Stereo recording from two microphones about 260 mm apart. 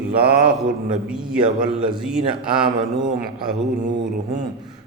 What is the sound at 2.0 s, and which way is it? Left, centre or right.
Speech, centre.